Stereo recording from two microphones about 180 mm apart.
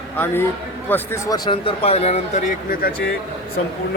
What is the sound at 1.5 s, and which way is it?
Speech, 30° left (ahead or behind).